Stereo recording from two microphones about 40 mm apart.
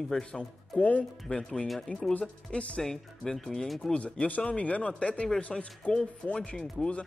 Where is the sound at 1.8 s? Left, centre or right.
Centre.